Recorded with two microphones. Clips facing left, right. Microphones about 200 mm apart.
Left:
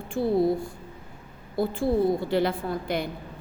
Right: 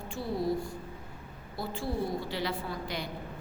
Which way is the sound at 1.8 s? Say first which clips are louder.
Left 9 dB; 55° left (ahead or behind).